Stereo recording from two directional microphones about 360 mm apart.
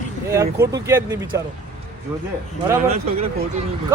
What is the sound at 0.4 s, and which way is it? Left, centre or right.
Speech, right.